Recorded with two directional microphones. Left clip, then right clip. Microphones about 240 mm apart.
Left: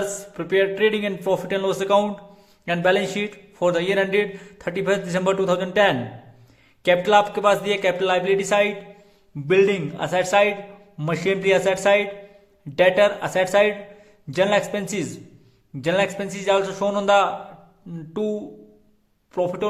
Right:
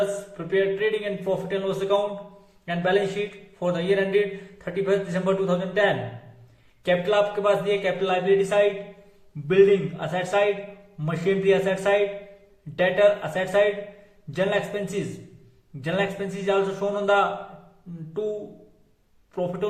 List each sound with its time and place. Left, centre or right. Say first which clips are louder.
0.3 s a man's voice: left 4 dB; left
19.3 s speech: left 5 dB; left